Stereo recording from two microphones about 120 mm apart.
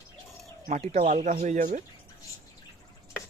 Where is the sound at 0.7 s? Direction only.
80° right.